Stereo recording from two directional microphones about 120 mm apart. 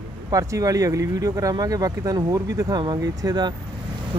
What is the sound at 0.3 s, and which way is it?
Speech, 25° right (ahead or behind).